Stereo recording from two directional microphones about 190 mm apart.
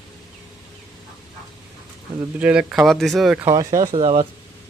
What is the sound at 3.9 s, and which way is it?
Speech, 30° right (ahead or behind).